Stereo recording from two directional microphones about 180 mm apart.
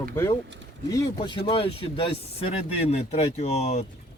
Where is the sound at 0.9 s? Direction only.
25° left (ahead or behind).